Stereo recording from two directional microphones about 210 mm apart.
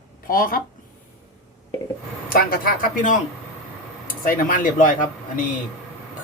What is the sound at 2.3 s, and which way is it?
Speech, 45° left (ahead or behind).